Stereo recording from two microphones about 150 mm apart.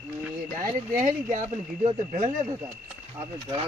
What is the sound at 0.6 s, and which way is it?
Speech, 60° right (ahead or behind).